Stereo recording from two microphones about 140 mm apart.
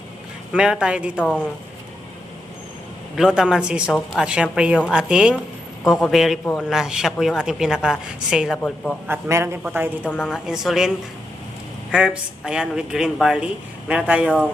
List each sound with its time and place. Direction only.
0.5 s speech: 5° right (ahead or behind)
1.2 s speech: 10° left (ahead or behind)
3.2 s speech: 5° right (ahead or behind)
6.4 s speech: 10° left (ahead or behind)
6.7 s speech: 5° right (ahead or behind)
8.5 s speech: 10° left (ahead or behind)
9.0 s speech: 15° right (ahead or behind)
10.1 s speech: 15° left (ahead or behind)
10.3 s speech: 5° right (ahead or behind)